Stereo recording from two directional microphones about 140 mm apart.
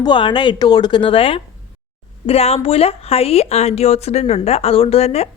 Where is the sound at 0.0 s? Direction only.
35° left (ahead or behind).